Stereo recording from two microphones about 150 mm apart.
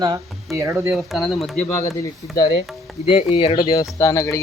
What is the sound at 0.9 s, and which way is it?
Speech, centre (ahead or behind).